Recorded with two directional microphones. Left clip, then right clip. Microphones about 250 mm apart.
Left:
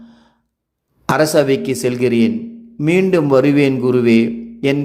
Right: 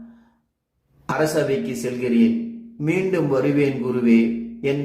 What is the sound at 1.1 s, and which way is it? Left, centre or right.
A man's voice, left.